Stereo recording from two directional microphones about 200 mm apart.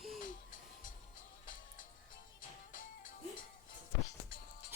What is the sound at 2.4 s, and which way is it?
Music, 40° left (ahead or behind).